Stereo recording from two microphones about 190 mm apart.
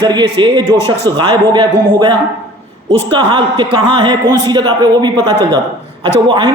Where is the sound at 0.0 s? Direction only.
25° right (ahead or behind).